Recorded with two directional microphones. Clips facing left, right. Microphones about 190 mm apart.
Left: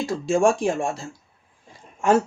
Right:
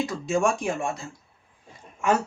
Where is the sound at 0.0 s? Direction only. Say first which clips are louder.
Left 4 dB; 30° left (ahead or behind).